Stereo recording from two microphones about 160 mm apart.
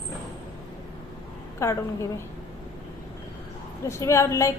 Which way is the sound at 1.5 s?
20° left (ahead or behind).